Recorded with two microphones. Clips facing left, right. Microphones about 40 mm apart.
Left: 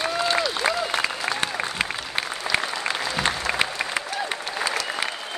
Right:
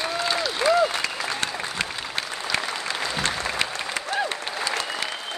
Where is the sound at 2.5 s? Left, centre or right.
Centre.